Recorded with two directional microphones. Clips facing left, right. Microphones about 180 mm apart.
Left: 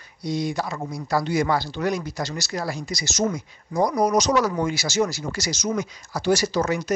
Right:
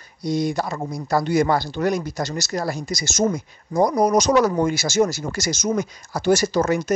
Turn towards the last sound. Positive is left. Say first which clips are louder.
# right 3 dB
turn(degrees=-50)  # may be behind; listen again after turning